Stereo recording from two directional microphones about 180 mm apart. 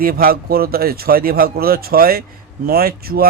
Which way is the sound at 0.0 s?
55° right (ahead or behind).